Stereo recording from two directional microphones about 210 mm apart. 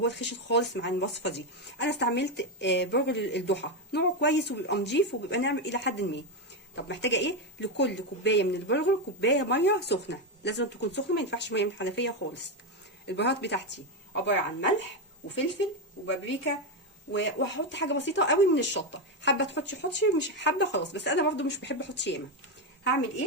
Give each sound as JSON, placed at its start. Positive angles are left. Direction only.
{"t": 0.0, "sound": "speech", "side_deg": 55}
{"t": 17.1, "sound": "speech", "side_deg": 55}